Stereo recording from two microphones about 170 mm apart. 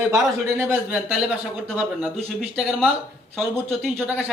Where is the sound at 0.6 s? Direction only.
10° right (ahead or behind).